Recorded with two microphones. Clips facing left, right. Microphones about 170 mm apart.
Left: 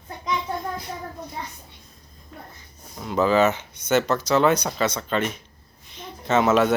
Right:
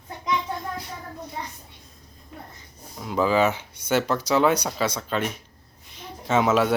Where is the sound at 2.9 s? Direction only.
5° right (ahead or behind).